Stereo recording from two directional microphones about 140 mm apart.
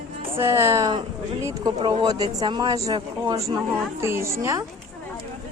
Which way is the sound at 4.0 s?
20° right (ahead or behind).